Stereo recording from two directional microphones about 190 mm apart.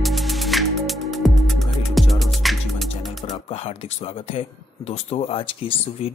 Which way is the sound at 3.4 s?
30° left (ahead or behind).